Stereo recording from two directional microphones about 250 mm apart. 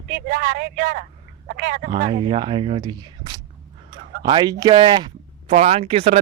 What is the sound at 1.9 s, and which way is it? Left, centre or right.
Speech, centre.